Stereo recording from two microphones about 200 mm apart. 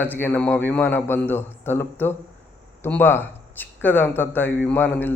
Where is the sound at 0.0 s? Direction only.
10° left (ahead or behind).